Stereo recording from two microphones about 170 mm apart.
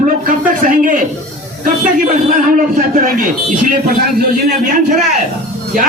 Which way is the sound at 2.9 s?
50° right (ahead or behind).